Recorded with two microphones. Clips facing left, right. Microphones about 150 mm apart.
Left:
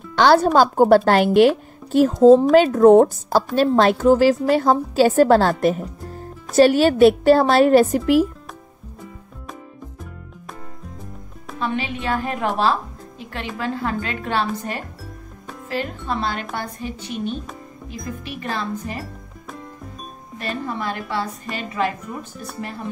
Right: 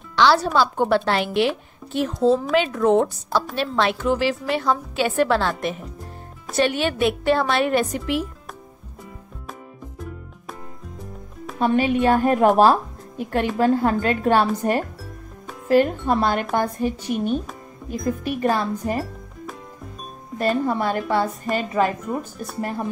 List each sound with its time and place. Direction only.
0.1 s a woman's voice: 50° left (ahead or behind)
11.6 s a woman's voice: 45° right (ahead or behind)
20.3 s a woman's voice: 40° right (ahead or behind)